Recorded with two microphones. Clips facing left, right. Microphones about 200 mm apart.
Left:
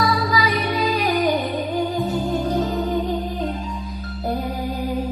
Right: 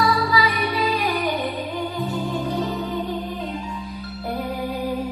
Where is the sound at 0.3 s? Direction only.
40° left (ahead or behind).